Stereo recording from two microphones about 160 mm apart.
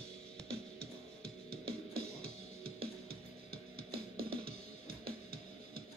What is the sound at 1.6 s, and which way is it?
Music, 75° right (ahead or behind).